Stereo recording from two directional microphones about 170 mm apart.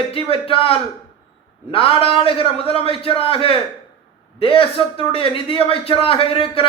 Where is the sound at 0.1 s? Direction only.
35° left (ahead or behind).